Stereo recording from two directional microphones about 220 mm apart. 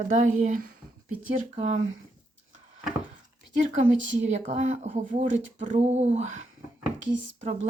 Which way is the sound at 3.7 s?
30° right (ahead or behind).